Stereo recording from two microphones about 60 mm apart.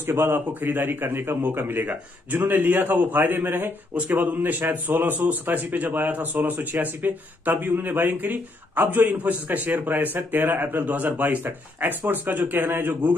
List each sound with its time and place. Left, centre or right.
0.0 s speech: right